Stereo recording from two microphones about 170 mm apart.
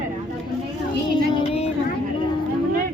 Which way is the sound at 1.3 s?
35° left (ahead or behind).